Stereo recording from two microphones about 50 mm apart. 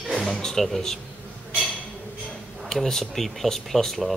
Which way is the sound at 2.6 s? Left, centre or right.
Centre.